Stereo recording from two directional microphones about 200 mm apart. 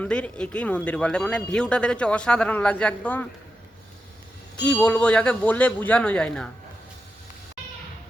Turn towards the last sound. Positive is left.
turn(degrees=5)  # may be behind; listen again after turning